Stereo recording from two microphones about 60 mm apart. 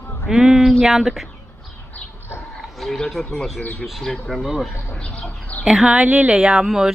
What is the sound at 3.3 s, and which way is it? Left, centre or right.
Speech, centre.